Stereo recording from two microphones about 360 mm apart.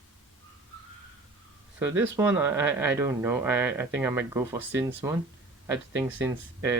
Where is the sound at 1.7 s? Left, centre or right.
Centre.